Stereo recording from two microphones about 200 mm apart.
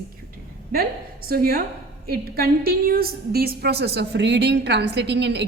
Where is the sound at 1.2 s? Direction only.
50° right (ahead or behind).